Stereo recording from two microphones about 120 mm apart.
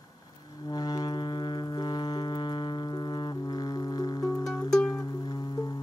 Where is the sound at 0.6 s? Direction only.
35° left (ahead or behind).